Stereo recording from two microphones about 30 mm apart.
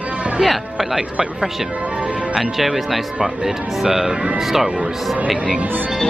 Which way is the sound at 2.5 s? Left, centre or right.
Centre.